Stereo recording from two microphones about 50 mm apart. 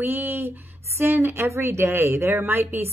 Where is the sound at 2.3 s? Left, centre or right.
Right.